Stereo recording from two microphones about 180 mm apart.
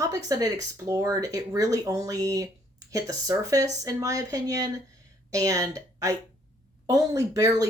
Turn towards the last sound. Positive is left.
turn(degrees=-20)  # may be behind; listen again after turning